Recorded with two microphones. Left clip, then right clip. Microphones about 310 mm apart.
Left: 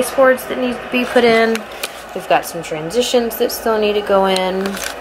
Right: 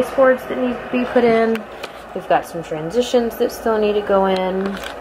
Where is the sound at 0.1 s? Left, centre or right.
Centre.